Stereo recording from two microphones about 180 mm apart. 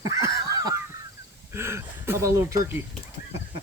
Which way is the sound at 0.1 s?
20° right (ahead or behind).